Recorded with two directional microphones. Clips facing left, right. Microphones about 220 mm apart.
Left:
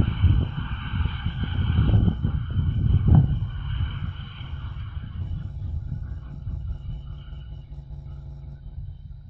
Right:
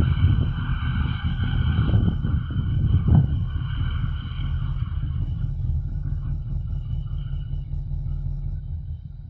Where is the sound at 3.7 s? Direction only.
50° right (ahead or behind).